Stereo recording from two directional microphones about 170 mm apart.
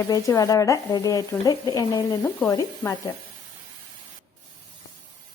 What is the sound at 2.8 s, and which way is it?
Speech, 15° left (ahead or behind).